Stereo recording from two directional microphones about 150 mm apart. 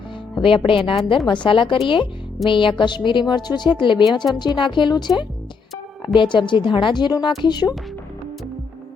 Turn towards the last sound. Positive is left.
turn(degrees=30)  # may be behind; listen again after turning